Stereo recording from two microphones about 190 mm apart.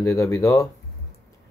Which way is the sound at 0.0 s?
15° left (ahead or behind).